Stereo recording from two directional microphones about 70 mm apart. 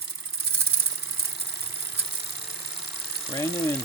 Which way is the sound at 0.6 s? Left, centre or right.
Right.